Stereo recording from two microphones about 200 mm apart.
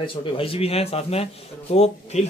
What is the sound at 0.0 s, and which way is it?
Speech, 25° left (ahead or behind).